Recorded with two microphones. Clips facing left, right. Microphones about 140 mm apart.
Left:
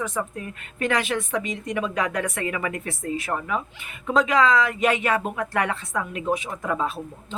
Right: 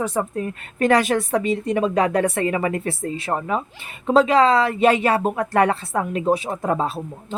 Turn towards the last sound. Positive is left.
turn(degrees=-35)  # may be behind; listen again after turning